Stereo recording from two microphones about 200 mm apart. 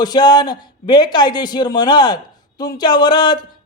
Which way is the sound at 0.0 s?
20° left (ahead or behind).